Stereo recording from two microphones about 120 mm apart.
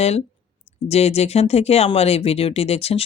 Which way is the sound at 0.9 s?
60° left (ahead or behind).